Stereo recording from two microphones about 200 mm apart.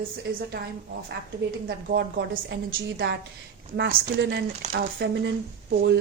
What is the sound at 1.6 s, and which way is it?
Speech, 55° right (ahead or behind).